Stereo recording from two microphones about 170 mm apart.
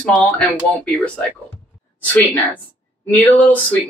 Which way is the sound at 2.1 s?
10° left (ahead or behind).